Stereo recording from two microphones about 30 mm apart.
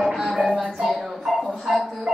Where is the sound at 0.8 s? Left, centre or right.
Centre.